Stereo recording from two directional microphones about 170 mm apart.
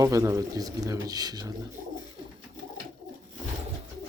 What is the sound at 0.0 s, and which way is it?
Speech, 20° right (ahead or behind).